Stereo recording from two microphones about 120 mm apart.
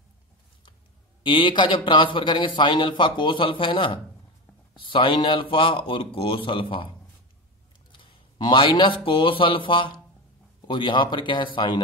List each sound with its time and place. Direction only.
1.2 s speech: 40° left (ahead or behind)
8.0 s speech: 45° left (ahead or behind)